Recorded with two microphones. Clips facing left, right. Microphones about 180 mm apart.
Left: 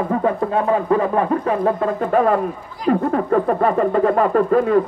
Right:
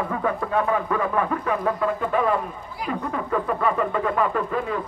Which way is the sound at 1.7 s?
45° left (ahead or behind).